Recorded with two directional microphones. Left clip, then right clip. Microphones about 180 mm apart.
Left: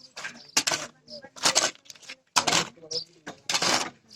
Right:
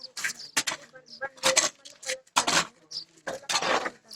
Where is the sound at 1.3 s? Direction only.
20° left (ahead or behind).